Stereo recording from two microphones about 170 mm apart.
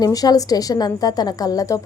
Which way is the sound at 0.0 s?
20° left (ahead or behind).